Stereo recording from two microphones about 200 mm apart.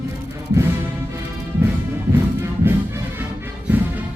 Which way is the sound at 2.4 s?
10° right (ahead or behind).